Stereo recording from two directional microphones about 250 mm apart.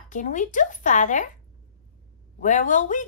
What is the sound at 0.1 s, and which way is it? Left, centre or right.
A woman's voice, left.